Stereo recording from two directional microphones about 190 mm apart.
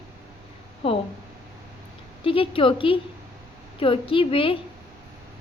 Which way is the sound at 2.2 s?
30° left (ahead or behind).